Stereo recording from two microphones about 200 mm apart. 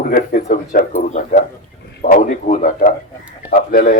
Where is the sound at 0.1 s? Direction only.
45° left (ahead or behind).